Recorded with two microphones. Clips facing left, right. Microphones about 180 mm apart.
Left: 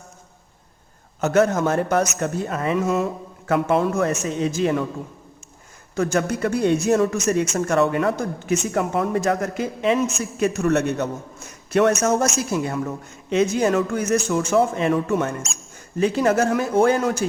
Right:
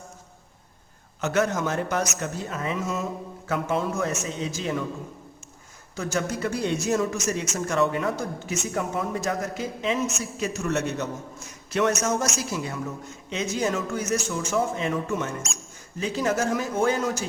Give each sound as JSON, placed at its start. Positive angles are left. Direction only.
{"t": 1.2, "sound": "a man's voice", "side_deg": 45}
{"t": 6.0, "sound": "a man's voice", "side_deg": 55}